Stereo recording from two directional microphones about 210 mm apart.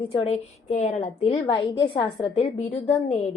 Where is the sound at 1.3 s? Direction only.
25° left (ahead or behind).